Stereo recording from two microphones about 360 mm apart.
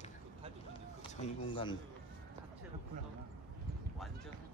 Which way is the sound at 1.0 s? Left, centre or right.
Centre.